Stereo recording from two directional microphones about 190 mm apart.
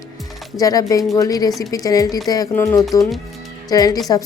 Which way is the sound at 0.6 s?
20° left (ahead or behind).